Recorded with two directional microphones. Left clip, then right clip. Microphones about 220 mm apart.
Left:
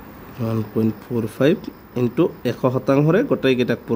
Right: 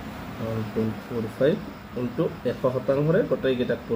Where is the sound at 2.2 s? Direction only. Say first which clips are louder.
Left 4 dB; 55° left (ahead or behind).